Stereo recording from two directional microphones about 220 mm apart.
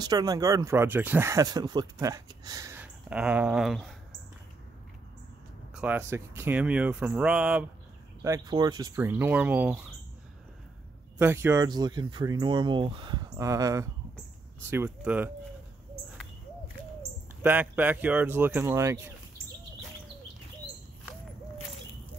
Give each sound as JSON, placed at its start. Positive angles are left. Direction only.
{"t": 0.0, "sound": "speech", "side_deg": -15}
{"t": 5.8, "sound": "speech", "side_deg": -10}
{"t": 8.2, "sound": "speech", "side_deg": -15}
{"t": 11.1, "sound": "speech", "side_deg": -10}
{"t": 17.4, "sound": "speech", "side_deg": -5}